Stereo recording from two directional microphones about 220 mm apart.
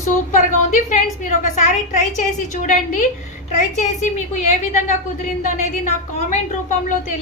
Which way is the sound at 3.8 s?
30° left (ahead or behind).